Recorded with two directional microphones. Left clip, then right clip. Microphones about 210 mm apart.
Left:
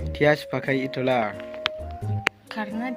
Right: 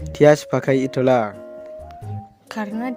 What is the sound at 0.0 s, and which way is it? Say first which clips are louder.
Speech: right 7 dB; 60° right (ahead or behind).